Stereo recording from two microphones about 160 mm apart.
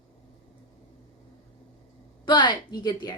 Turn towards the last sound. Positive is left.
turn(degrees=25)  # may be behind; listen again after turning